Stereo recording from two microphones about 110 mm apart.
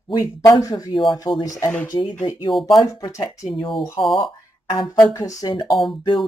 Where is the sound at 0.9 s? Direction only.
45° left (ahead or behind).